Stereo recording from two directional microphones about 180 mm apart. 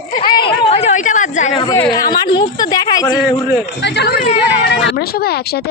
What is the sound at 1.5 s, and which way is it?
A woman's voice, 25° left (ahead or behind).